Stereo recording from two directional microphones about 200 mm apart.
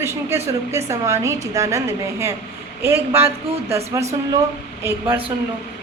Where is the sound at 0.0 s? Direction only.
15° right (ahead or behind).